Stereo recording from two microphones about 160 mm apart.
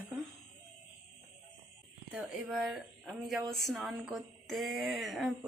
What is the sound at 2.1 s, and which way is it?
Speech, 5° right (ahead or behind).